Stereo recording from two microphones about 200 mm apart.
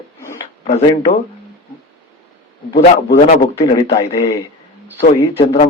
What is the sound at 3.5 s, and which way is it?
Speech, 30° left (ahead or behind).